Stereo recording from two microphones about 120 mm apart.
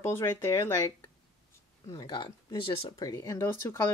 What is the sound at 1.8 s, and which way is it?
Speech, 35° left (ahead or behind).